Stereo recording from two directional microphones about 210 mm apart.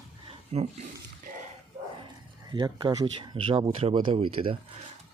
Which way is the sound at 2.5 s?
20° right (ahead or behind).